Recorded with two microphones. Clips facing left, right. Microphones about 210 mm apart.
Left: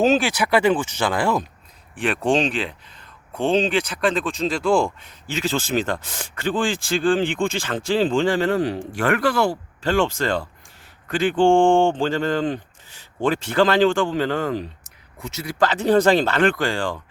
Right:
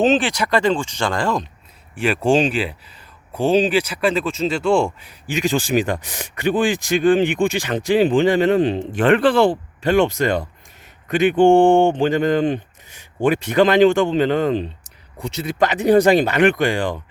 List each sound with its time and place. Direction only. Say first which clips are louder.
0.0 s speech: right 1 dB; centre (ahead or behind)
2.0 s speech: right 3 dB; 5° right (ahead or behind)